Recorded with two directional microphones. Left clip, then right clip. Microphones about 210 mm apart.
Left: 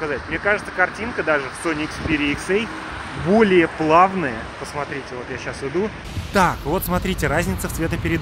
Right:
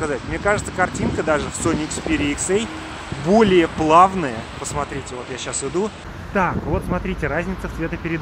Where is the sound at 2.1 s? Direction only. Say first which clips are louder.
Left 1 dB; 90° right.